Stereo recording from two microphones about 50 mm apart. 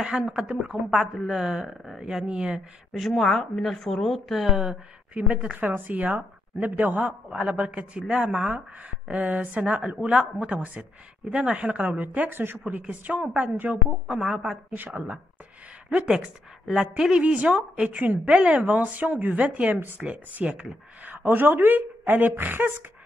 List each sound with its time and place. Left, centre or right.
0.3 s speech: right
0.8 s speech: centre
3.0 s a woman's voice: centre
5.1 s a woman's voice: right
7.2 s a woman's voice: right
11.2 s a woman's voice: centre
14.7 s speech: right
16.1 s a woman's voice: centre; by 22.8 s right